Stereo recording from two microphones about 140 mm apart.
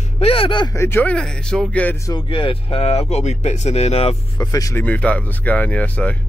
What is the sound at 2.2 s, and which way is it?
Speech, 40° left (ahead or behind).